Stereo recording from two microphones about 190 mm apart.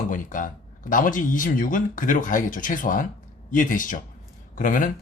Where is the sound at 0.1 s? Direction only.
45° left (ahead or behind).